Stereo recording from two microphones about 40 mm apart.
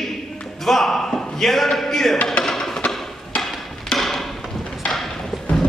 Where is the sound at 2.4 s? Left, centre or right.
Centre.